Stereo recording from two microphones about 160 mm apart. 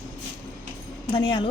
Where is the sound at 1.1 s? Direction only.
30° left (ahead or behind).